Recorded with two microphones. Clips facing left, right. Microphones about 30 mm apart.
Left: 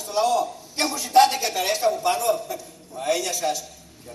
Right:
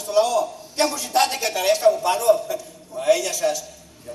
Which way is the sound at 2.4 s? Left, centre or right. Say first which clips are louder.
Right 5 dB; centre.